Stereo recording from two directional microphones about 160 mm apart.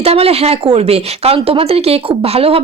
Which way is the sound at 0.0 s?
40° right (ahead or behind).